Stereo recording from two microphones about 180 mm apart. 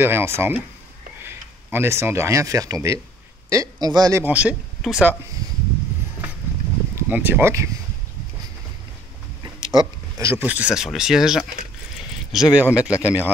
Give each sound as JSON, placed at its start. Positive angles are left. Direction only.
{"t": 0.0, "sound": "speech", "side_deg": -15}
{"t": 7.0, "sound": "speech", "side_deg": -10}
{"t": 9.4, "sound": "speech", "side_deg": -20}